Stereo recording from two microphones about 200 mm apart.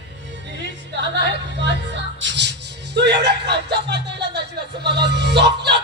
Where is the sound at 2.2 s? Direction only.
60° right (ahead or behind).